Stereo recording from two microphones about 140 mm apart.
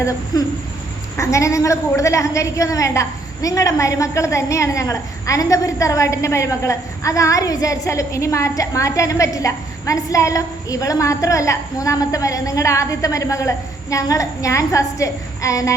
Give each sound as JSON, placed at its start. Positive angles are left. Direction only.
{"t": 0.3, "sound": "a woman's voice", "side_deg": 25}